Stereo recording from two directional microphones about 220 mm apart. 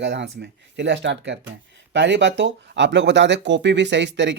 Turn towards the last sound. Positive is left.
turn(degrees=-55)  # may be behind; listen again after turning